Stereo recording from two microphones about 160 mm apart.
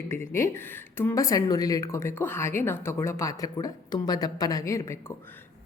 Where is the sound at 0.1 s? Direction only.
15° left (ahead or behind).